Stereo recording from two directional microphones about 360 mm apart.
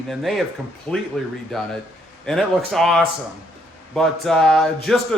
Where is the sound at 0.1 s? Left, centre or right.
Centre.